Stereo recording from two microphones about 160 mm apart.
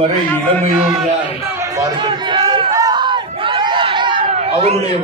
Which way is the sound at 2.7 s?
25° right (ahead or behind).